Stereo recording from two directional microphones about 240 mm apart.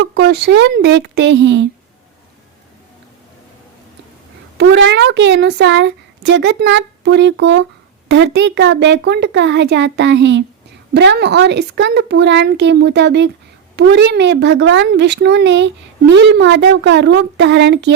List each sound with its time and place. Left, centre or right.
0.0 s a woman's voice: right
4.5 s a woman's voice: right